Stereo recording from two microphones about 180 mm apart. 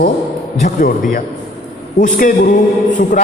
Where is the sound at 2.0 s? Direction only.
50° left (ahead or behind).